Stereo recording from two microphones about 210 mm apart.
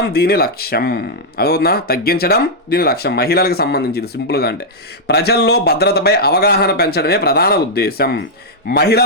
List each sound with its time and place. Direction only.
0.1 s speech: 50° left (ahead or behind)